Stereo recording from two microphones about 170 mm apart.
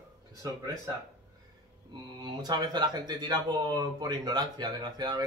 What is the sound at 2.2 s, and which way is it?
Speech, 25° right (ahead or behind).